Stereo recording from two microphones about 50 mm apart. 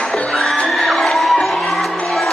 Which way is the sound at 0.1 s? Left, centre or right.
Centre.